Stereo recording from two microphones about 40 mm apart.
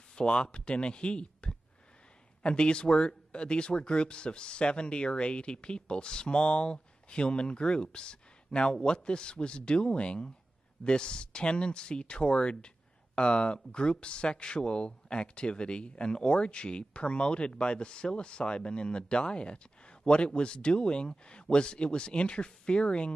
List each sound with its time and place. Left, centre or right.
0.1 s speech: left